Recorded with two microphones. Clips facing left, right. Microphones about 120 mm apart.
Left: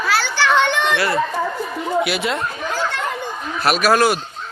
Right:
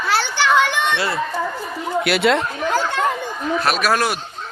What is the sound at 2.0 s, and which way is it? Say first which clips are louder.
Speech: right 4 dB; 60° right (ahead or behind).